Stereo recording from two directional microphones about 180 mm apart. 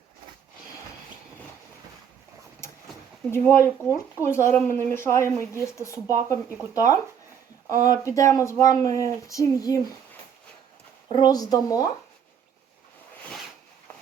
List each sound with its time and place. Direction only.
3.2 s speech: 15° left (ahead or behind)
11.1 s speech: 20° left (ahead or behind)